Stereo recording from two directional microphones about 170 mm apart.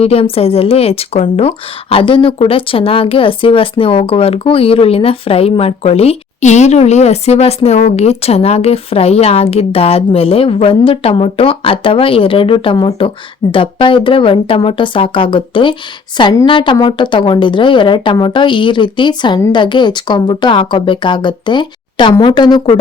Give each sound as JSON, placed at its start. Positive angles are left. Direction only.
{"t": 0.0, "sound": "a woman's voice", "side_deg": 35}